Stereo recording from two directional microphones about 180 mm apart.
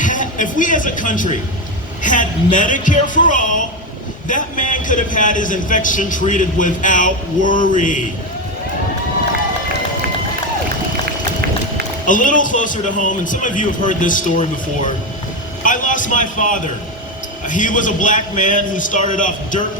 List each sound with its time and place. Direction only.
0.0 s a man's voice: 45° left (ahead or behind)
12.0 s speech: 45° left (ahead or behind)
15.6 s a man's voice: 45° left (ahead or behind)